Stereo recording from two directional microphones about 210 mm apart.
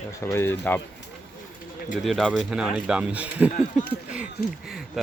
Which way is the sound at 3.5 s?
40° left (ahead or behind).